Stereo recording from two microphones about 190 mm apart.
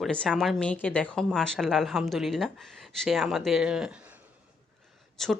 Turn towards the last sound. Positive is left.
turn(degrees=0)  # may be behind; listen again after turning